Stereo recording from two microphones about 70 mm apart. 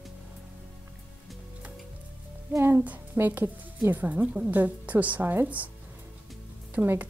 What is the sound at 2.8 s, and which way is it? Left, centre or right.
A woman's voice, right.